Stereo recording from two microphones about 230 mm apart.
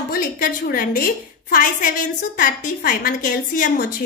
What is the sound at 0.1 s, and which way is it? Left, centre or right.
A woman's voice, left.